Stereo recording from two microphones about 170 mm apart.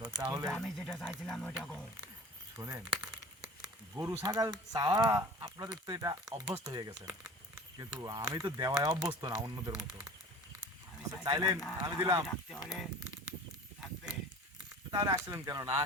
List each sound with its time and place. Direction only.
0.0 s a sound: 20° right (ahead or behind)
0.4 s speech: centre (ahead or behind)
2.6 s crumpling: 20° right (ahead or behind)
3.9 s speech: 15° right (ahead or behind)
11.2 s speech: 20° right (ahead or behind)
12.5 s speech: 5° right (ahead or behind)
14.8 s speech: 20° right (ahead or behind)